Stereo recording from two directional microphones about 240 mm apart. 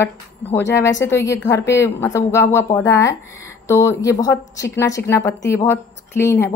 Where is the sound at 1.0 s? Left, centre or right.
Centre.